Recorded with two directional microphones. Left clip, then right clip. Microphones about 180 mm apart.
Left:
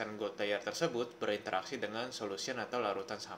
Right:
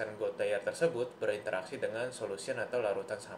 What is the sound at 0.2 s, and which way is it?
Speech, 45° left (ahead or behind).